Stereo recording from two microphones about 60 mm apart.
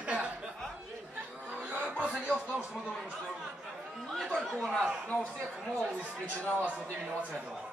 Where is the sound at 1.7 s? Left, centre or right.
Right.